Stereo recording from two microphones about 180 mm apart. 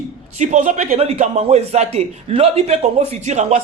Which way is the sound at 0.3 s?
40° right (ahead or behind).